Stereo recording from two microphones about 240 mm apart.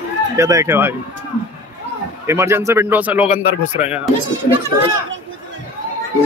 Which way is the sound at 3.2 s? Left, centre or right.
Left.